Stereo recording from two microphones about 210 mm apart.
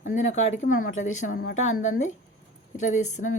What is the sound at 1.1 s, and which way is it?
A woman's voice, 35° left (ahead or behind).